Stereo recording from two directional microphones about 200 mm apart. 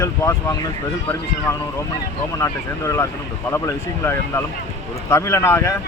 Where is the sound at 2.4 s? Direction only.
15° left (ahead or behind).